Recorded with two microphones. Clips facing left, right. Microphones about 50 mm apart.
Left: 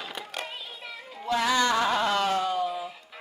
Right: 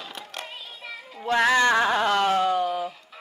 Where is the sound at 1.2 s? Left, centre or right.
Right.